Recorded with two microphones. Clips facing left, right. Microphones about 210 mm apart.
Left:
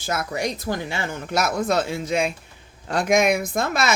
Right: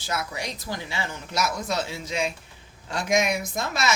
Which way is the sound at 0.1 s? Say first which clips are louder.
Left 6 dB; 50° left (ahead or behind).